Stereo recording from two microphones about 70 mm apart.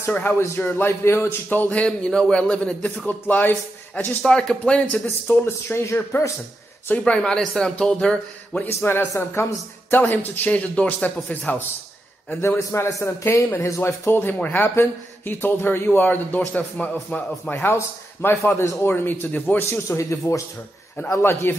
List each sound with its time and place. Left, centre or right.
0.0 s speech: left
0.4 s speech: left
4.2 s speech: centre
5.3 s speech: left
5.7 s speech: left
7.1 s speech: centre
8.6 s speech: left
12.3 s speech: left
14.1 s speech: left
17.6 s speech: left
20.0 s speech: left
21.2 s speech: left